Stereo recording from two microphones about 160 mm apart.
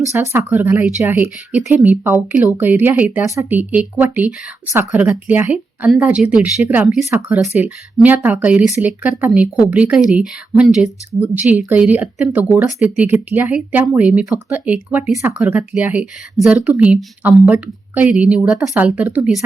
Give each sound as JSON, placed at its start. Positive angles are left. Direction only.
{"t": 0.1, "sound": "speech", "side_deg": -15}